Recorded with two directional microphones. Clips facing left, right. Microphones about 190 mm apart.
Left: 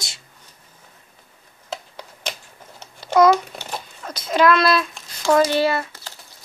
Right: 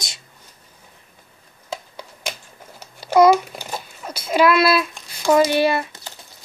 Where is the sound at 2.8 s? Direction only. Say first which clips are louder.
Right 2 dB; 10° right (ahead or behind).